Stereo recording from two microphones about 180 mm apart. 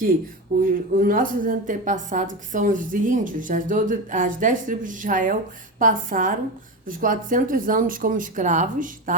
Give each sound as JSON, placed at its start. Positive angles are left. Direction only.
{"t": 0.6, "sound": "a woman's voice", "side_deg": -50}